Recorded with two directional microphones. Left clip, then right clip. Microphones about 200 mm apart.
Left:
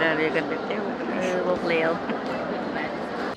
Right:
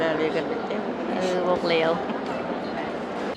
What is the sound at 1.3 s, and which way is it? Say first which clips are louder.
Vehicle: right 2 dB; 10° right (ahead or behind).